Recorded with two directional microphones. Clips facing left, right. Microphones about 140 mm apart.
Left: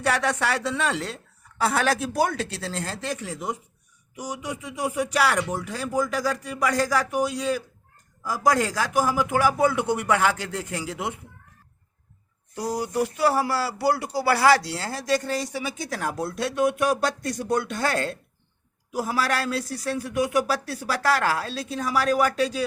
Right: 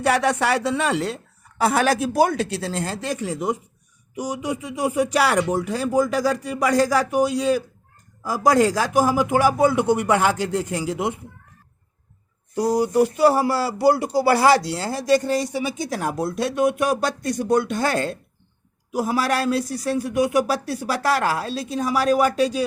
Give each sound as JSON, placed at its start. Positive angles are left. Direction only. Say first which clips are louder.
{"t": 0.0, "sound": "speech", "louder": "right 4 dB", "side_deg": -15}
{"t": 8.2, "sound": "speech", "louder": "right 5 dB", "side_deg": -30}
{"t": 12.6, "sound": "speech", "louder": "right 7 dB", "side_deg": -15}